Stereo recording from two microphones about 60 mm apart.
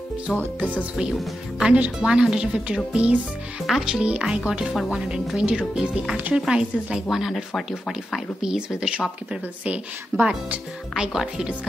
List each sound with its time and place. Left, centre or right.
0.3 s speech: centre
1.6 s speech: centre
3.6 s speech: centre
3.9 s speech: centre
4.7 s speech: centre
5.3 s speech: centre
6.1 s speech: right
6.5 s speech: centre
7.5 s speech: centre
8.4 s speech: centre
11.0 s speech: centre